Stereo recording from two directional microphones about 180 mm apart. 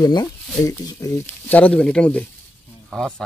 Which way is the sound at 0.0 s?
25° left (ahead or behind).